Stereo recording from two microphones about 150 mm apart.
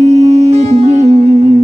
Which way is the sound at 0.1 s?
45° right (ahead or behind).